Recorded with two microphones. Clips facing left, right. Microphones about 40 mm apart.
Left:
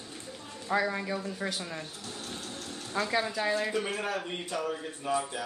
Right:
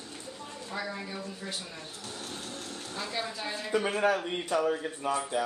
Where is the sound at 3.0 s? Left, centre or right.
Left.